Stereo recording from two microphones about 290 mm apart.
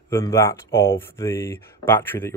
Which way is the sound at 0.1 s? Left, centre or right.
Centre.